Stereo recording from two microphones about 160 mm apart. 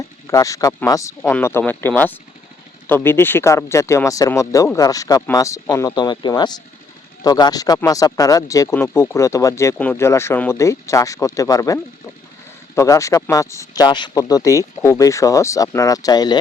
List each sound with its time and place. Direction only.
0.3 s speech: 20° left (ahead or behind)